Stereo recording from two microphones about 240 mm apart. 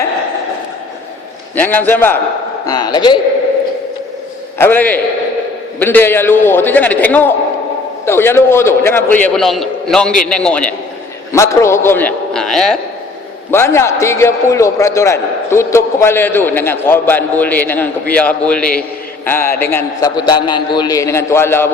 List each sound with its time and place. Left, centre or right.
1.5 s a man's voice: centre
4.5 s a man's voice: centre